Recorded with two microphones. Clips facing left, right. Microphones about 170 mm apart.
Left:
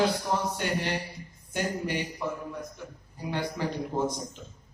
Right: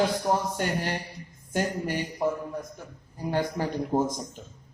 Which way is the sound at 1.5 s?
45° right (ahead or behind).